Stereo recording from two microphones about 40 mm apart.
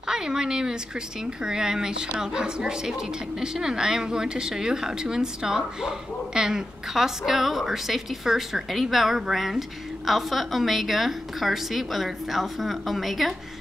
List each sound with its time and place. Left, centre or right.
0.1 s a woman's voice: centre